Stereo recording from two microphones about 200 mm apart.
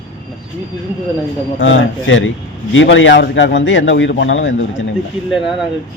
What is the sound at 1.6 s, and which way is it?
A man's voice, 70° left (ahead or behind).